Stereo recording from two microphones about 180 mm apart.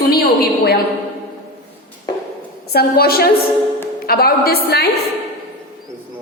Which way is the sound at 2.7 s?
55° left (ahead or behind).